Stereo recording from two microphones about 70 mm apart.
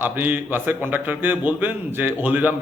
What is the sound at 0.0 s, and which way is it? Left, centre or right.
A man's voice, right.